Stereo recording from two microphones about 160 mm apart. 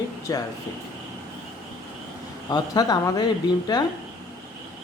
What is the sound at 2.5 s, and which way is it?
Speech, 25° left (ahead or behind).